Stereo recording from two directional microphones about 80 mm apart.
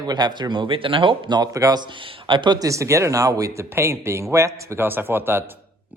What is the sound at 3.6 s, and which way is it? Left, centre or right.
A man's voice, right.